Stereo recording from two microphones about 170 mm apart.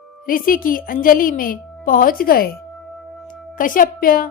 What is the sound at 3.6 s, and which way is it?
Speech, 55° left (ahead or behind).